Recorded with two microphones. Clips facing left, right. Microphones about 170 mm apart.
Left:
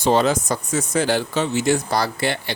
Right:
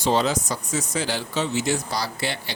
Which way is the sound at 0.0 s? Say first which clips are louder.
Left 4 dB; 55° left (ahead or behind).